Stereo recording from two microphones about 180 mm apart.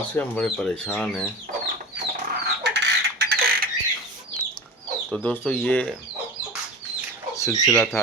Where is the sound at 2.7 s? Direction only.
65° right (ahead or behind).